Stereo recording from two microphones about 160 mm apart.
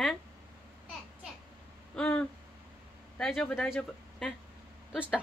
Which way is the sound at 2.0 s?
10° left (ahead or behind).